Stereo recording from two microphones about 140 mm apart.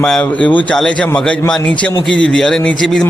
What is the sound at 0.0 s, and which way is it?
A man's voice, 5° left (ahead or behind).